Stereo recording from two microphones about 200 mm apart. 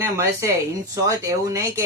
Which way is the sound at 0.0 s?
15° right (ahead or behind).